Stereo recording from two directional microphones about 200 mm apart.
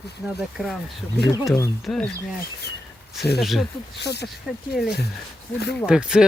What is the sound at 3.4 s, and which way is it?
Speech, centre (ahead or behind).